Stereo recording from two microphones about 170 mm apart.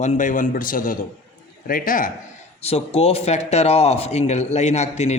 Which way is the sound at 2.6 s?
35° left (ahead or behind).